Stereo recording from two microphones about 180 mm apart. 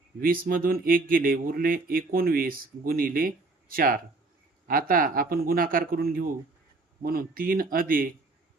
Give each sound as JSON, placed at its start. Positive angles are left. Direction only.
{"t": 0.2, "sound": "speech", "side_deg": -55}